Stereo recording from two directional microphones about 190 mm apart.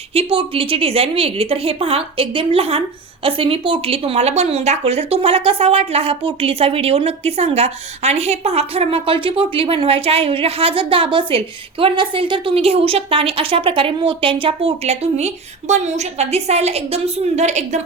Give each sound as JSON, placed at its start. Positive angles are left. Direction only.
{"t": 0.1, "sound": "a woman's voice", "side_deg": -30}